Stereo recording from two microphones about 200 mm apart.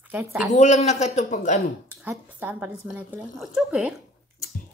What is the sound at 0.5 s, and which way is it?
A man's voice, 35° left (ahead or behind).